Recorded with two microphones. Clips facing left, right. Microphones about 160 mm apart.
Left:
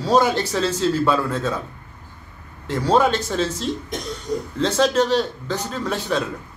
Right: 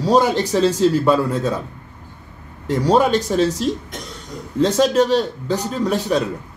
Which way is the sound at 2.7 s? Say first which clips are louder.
Right 2 dB; 15° right (ahead or behind).